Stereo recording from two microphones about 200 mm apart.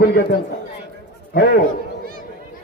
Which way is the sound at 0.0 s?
50° left (ahead or behind).